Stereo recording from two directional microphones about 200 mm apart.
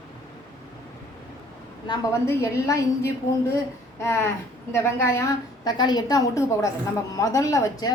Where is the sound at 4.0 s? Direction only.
15° left (ahead or behind).